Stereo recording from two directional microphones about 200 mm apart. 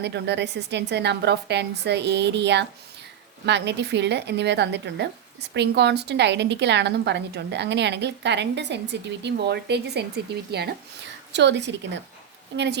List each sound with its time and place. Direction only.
0.0 s a woman's voice: 60° right (ahead or behind)